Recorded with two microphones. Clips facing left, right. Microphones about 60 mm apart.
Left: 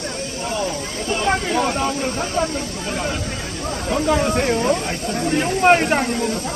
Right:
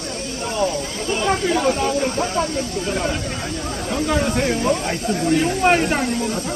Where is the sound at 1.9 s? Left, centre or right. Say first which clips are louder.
Right 2 dB; centre.